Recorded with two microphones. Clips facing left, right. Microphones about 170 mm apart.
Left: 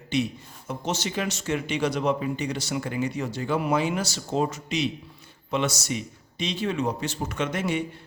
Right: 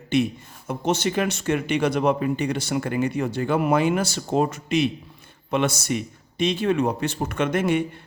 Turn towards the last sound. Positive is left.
turn(degrees=-55)  # may be behind; listen again after turning